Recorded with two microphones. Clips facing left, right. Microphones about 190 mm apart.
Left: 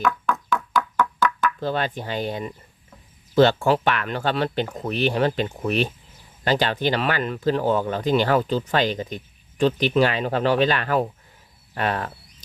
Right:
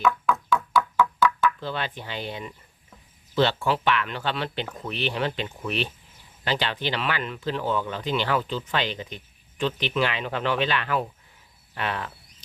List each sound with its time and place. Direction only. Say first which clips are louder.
1.5 s speech: left 6 dB; 45° left (ahead or behind)